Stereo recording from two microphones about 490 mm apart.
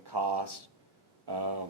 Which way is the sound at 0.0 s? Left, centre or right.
Right.